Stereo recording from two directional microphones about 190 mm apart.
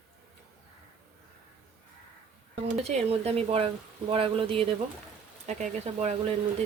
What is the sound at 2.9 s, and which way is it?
Speech, 35° right (ahead or behind).